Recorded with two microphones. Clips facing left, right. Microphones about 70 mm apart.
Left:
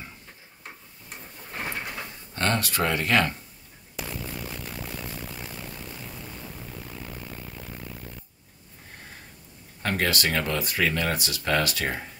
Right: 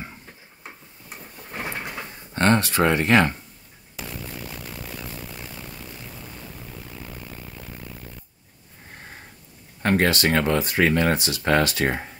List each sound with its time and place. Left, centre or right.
0.7 s a sound: centre
2.0 s speech: right
9.8 s speech: right